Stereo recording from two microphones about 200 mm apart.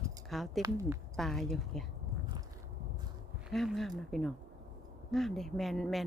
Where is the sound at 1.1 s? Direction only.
Centre (ahead or behind).